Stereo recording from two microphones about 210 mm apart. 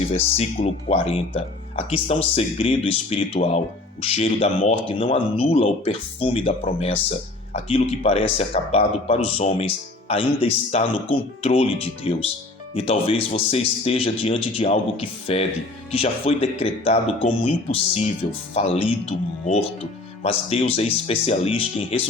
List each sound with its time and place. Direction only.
0.1 s speech: 30° left (ahead or behind)